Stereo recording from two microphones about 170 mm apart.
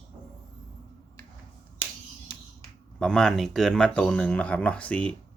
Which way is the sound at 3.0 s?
5° left (ahead or behind).